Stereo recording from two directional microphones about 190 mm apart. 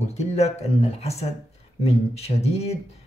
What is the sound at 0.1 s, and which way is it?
Speech, 35° left (ahead or behind).